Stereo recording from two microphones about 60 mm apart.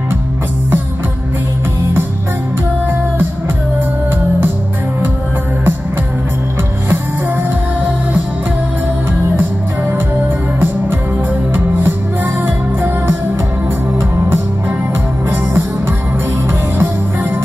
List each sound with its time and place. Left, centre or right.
9.4 s music: right
11.5 s music: right
13.9 s music: right
16.7 s music: right